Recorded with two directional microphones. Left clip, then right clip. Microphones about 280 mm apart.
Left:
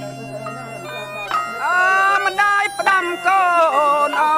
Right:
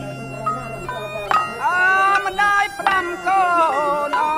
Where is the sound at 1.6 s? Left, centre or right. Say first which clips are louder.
Left 3 dB; centre.